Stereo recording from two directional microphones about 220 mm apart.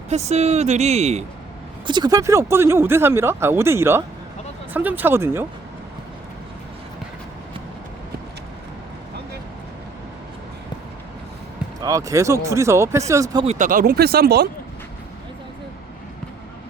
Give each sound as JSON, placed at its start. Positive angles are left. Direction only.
{"t": 0.1, "sound": "speech", "side_deg": -30}
{"t": 1.9, "sound": "speech", "side_deg": -20}
{"t": 11.8, "sound": "speech", "side_deg": -15}
{"t": 13.4, "sound": "speech", "side_deg": -30}